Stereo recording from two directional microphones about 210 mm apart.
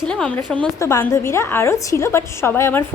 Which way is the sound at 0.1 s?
5° left (ahead or behind).